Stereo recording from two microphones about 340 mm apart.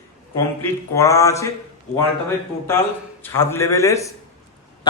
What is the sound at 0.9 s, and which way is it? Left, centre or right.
Speech, centre.